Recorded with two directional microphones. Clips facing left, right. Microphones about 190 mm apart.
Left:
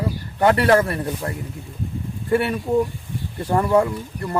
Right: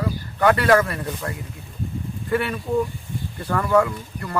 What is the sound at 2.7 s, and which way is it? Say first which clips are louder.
Speech: left 1 dB; 20° left (ahead or behind).